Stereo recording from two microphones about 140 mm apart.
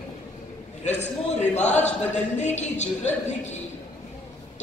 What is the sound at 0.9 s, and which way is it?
A man's voice, 55° left (ahead or behind).